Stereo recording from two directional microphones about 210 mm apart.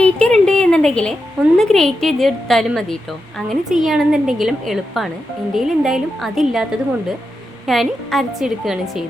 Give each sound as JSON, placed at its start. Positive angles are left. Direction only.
{"t": 0.0, "sound": "a woman's voice", "side_deg": 5}